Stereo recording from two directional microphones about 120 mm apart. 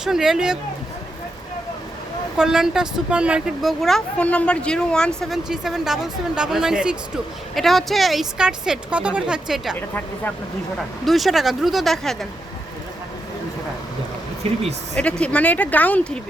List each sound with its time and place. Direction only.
0.0 s speech: 5° right (ahead or behind)
2.4 s speech: 5° right (ahead or behind)
9.7 s speech: 15° left (ahead or behind)
11.0 s speech: centre (ahead or behind)
14.4 s speech: 55° right (ahead or behind)
15.2 s speech: 10° left (ahead or behind)